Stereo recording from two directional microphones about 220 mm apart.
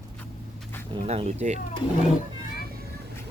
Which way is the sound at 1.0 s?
30° right (ahead or behind).